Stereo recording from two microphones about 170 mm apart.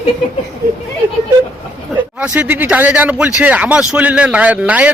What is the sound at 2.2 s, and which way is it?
A man's voice, 10° right (ahead or behind).